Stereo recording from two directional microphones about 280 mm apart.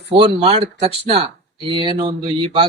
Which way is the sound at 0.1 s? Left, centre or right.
Centre.